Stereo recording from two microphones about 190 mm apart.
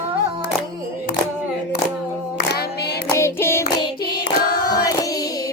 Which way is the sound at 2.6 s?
55° left (ahead or behind).